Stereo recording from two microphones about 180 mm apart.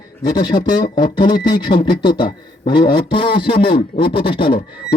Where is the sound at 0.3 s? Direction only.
25° left (ahead or behind).